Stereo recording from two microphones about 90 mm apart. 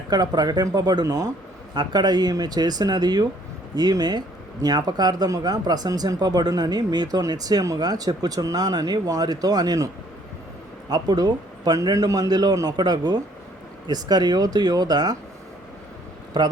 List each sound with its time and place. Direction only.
0.1 s speech: 50° right (ahead or behind)
1.7 s speech: 50° right (ahead or behind)
16.4 s speech: 50° right (ahead or behind)